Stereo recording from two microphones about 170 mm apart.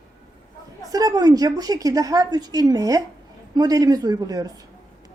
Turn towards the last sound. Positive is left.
turn(degrees=-20)  # may be behind; listen again after turning